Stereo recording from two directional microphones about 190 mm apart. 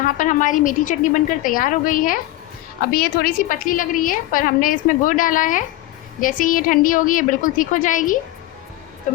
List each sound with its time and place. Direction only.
0.2 s a woman's voice: 40° left (ahead or behind)